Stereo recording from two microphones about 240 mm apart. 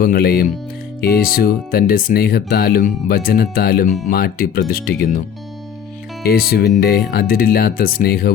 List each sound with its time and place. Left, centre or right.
0.0 s speech: left
6.2 s speech: left